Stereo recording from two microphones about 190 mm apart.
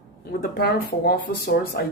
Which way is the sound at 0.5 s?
55° left (ahead or behind).